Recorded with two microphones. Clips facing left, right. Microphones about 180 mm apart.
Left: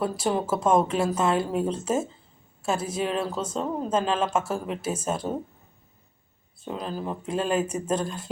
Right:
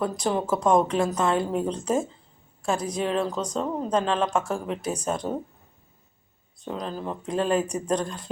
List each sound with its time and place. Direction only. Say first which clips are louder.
0.0 s a woman's voice: even; 5° left (ahead or behind)
6.6 s a woman's voice: even; 5° left (ahead or behind)